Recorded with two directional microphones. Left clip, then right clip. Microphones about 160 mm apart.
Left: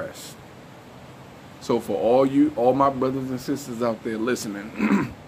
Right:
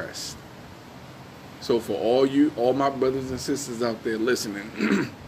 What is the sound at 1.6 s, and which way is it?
Speech, 45° left (ahead or behind).